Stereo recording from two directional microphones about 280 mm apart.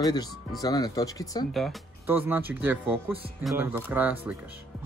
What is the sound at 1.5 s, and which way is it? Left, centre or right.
Speech, centre.